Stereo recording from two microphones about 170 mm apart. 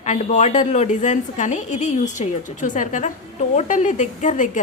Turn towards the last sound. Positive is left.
turn(degrees=45)  # may be behind; listen again after turning